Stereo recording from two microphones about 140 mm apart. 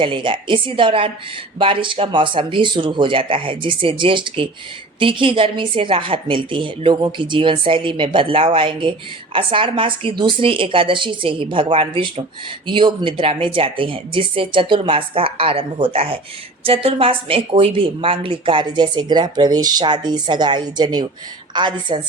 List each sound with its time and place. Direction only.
0.0 s a woman's voice: 35° right (ahead or behind)